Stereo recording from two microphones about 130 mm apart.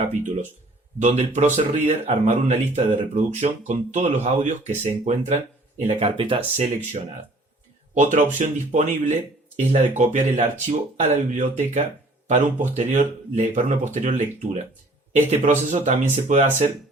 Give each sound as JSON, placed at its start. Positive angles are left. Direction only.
{"t": 0.9, "sound": "speech", "side_deg": -65}
{"t": 3.7, "sound": "speech", "side_deg": -70}
{"t": 7.9, "sound": "speech", "side_deg": -70}